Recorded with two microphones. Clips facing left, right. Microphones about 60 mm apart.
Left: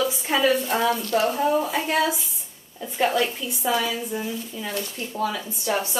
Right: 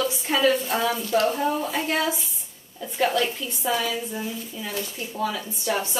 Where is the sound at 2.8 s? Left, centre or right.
Centre.